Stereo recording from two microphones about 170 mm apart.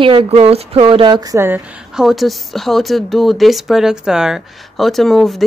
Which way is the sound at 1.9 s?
Centre (ahead or behind).